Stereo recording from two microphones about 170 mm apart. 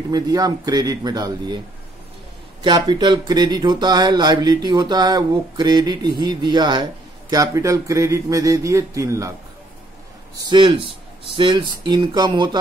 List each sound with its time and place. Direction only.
0.1 s speech: 20° right (ahead or behind)
2.6 s speech: 25° right (ahead or behind)
10.5 s speech: 30° right (ahead or behind)